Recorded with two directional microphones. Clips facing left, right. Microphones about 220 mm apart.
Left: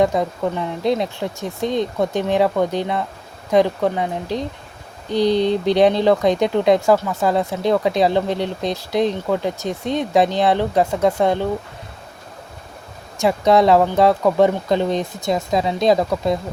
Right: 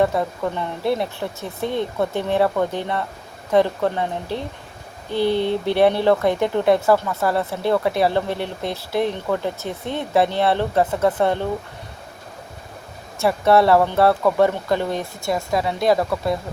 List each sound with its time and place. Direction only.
0.0 s speech: 15° left (ahead or behind)
13.1 s speech: 15° left (ahead or behind)